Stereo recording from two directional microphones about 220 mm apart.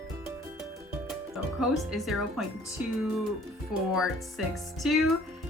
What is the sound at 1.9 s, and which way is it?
Speech, centre (ahead or behind).